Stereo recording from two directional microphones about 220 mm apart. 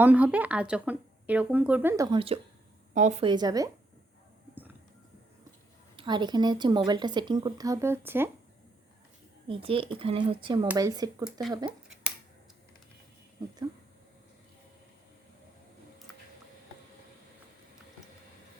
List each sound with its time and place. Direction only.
0.0 s a woman's voice: 5° right (ahead or behind)
6.0 s speech: 20° right (ahead or behind)
9.5 s a woman's voice: 25° right (ahead or behind)